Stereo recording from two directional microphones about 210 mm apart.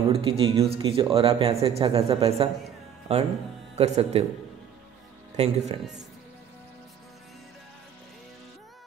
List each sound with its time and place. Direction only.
0.1 s speech: 25° right (ahead or behind)
5.3 s speech: 30° right (ahead or behind)